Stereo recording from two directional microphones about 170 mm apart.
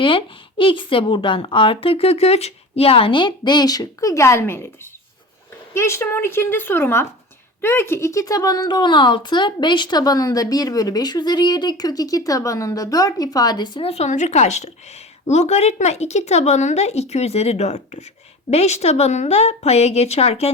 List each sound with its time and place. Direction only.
0.0 s a woman's voice: 30° left (ahead or behind); by 4.7 s 15° left (ahead or behind)
5.7 s a woman's voice: 15° left (ahead or behind); by 20.5 s 35° left (ahead or behind)